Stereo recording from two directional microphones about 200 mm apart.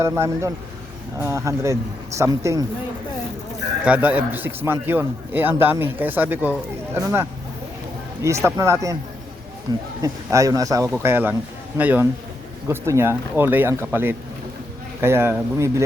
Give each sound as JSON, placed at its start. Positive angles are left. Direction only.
{"t": 0.0, "sound": "a man's voice", "side_deg": -15}
{"t": 3.8, "sound": "a man's voice", "side_deg": -10}
{"t": 8.2, "sound": "a man's voice", "side_deg": -15}